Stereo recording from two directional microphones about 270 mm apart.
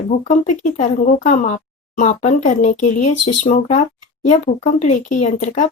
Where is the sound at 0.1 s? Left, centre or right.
Left.